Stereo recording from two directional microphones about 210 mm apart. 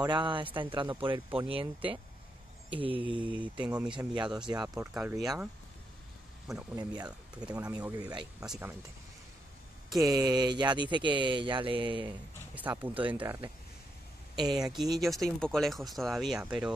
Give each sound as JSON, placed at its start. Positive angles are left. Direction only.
{"t": 0.0, "sound": "speech", "side_deg": -20}
{"t": 3.3, "sound": "speech", "side_deg": -5}
{"t": 3.9, "sound": "speech", "side_deg": -20}
{"t": 4.9, "sound": "speech", "side_deg": -5}
{"t": 6.5, "sound": "speech", "side_deg": 0}
{"t": 6.8, "sound": "speech", "side_deg": -20}
{"t": 7.1, "sound": "speech", "side_deg": -5}
{"t": 7.7, "sound": "speech", "side_deg": -15}
{"t": 8.4, "sound": "speech", "side_deg": -5}
{"t": 9.9, "sound": "speech", "side_deg": -15}
{"t": 12.5, "sound": "speech", "side_deg": -10}
{"t": 14.3, "sound": "speech", "side_deg": -20}
{"t": 15.0, "sound": "speech", "side_deg": 0}